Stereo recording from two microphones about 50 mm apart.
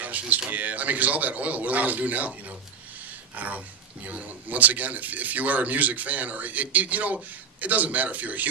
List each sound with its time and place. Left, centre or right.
0.0 s a man's voice: right